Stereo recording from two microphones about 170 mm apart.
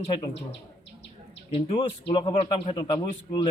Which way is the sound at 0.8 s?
90° left.